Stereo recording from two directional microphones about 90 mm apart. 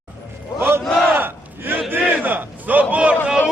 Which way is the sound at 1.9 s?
20° right (ahead or behind).